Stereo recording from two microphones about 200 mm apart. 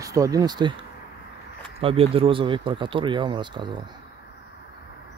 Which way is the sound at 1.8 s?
30° right (ahead or behind).